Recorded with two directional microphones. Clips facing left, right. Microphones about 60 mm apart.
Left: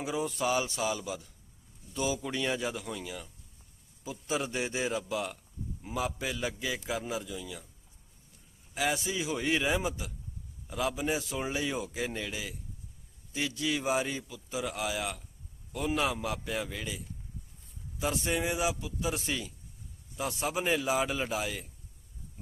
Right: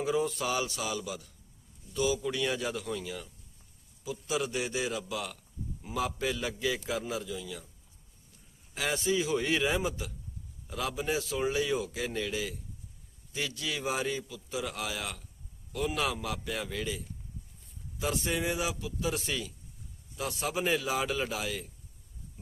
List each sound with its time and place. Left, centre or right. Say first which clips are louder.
0.0 s a man's voice: right 2 dB; centre
4.0 s a man's voice: right 1 dB; left; by 7.6 s centre
8.7 s a man's voice: right 1 dB; centre
13.6 s a man's voice: left 4 dB; left
16.6 s a man's voice: right 1 dB; centre
18.0 s a man's voice: even; left